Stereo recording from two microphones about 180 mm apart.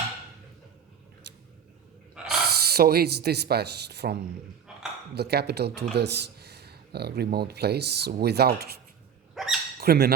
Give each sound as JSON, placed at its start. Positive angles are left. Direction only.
{"t": 2.4, "sound": "speech", "side_deg": -60}
{"t": 9.3, "sound": "dog", "side_deg": 0}
{"t": 9.8, "sound": "speech", "side_deg": -60}